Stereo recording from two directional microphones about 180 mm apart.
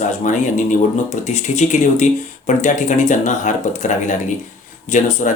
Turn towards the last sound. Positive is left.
turn(degrees=40)  # may be behind; listen again after turning